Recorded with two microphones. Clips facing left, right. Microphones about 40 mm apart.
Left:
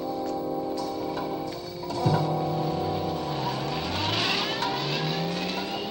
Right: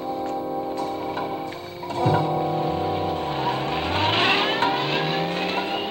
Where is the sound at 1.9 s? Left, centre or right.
Right.